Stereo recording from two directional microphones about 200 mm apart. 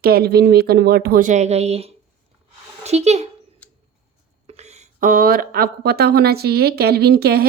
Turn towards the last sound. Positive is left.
turn(degrees=-50)  # may be behind; listen again after turning